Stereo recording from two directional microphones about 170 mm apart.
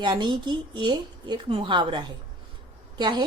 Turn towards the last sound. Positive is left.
turn(degrees=-25)  # may be behind; listen again after turning